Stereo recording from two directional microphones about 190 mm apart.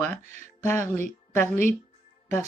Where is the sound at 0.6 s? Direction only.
15° left (ahead or behind).